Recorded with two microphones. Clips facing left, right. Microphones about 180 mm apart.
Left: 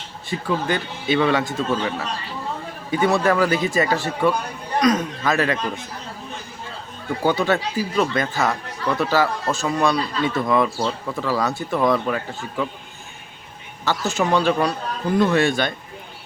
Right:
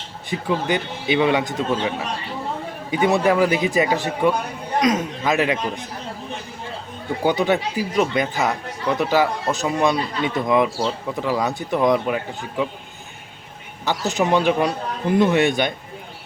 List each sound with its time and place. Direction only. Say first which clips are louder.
0.3 s a man's voice: right 1 dB; 15° right (ahead or behind)
7.2 s speech: right 1 dB; 15° right (ahead or behind)
14.1 s a man's voice: right 1 dB; 20° right (ahead or behind)